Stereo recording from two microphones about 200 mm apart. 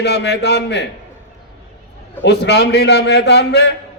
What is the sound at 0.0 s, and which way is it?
Speech, 55° left (ahead or behind).